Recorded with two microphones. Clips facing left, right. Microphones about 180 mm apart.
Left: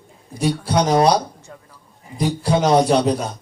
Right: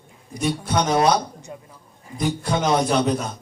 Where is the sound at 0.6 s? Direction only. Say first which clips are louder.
Left 4 dB; 35° left (ahead or behind).